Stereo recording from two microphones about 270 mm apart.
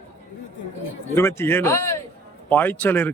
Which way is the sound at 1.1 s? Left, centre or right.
Centre.